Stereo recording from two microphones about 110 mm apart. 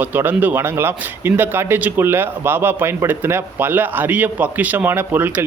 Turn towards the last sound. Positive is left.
turn(degrees=-15)  # may be behind; listen again after turning